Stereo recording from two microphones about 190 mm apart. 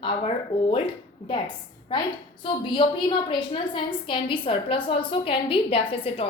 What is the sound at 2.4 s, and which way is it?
A woman's voice, 25° left (ahead or behind).